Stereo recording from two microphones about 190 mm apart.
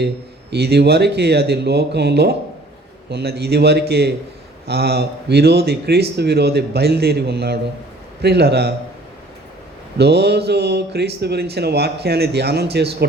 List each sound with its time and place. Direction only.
0.5 s a man's voice: 60° right (ahead or behind)
10.0 s a man's voice: 60° right (ahead or behind)